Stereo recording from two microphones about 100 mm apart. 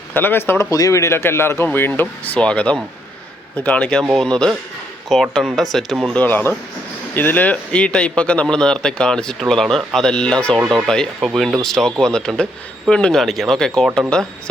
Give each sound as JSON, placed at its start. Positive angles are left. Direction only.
{"t": 0.1, "sound": "speech", "side_deg": 20}
{"t": 0.7, "sound": "speech", "side_deg": 35}
{"t": 6.1, "sound": "speech", "side_deg": 20}